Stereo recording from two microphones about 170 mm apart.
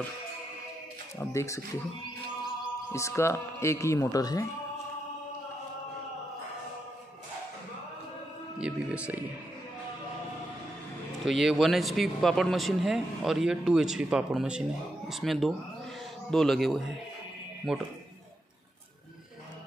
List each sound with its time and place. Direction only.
1.3 s speech: 15° left (ahead or behind)
2.9 s speech: 15° left (ahead or behind)
8.5 s speech: 5° right (ahead or behind)
11.2 s speech: centre (ahead or behind)